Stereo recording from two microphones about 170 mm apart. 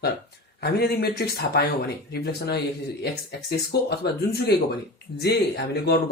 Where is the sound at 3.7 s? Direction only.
70° left (ahead or behind).